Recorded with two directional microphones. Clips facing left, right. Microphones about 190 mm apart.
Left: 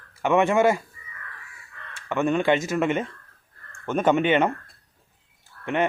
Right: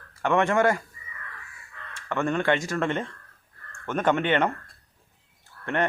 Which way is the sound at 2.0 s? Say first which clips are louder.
Left 3 dB; 10° left (ahead or behind).